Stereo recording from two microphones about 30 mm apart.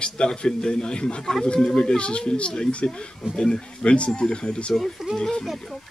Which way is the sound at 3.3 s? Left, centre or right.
Left.